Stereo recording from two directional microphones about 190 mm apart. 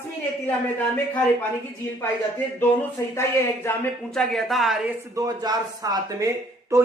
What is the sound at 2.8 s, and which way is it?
Speech, 15° left (ahead or behind).